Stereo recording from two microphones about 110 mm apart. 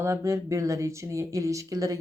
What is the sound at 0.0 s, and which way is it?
Speech, 25° right (ahead or behind).